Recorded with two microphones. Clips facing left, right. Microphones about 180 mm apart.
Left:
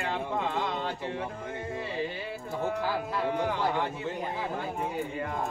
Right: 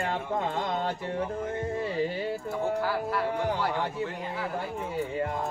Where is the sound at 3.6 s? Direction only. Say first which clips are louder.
Even; 20° left (ahead or behind).